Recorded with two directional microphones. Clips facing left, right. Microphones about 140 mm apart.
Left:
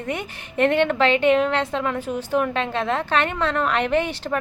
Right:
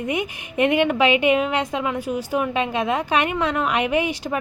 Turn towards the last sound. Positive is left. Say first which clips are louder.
# even
turn(degrees=-10)  # may be behind; listen again after turning